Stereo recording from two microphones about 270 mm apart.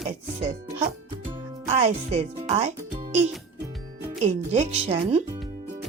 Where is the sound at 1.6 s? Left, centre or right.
Right.